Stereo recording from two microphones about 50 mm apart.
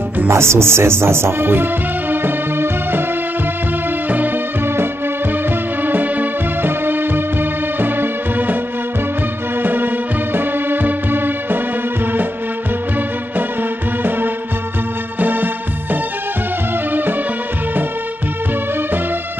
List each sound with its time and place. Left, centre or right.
0.3 s speech: right
5.8 s music: right
9.6 s music: right
15.1 s music: right